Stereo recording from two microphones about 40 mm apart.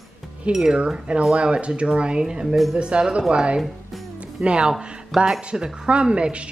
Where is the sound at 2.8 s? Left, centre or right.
Right.